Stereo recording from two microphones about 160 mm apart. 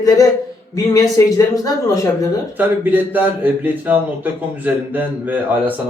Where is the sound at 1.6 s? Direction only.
20° left (ahead or behind).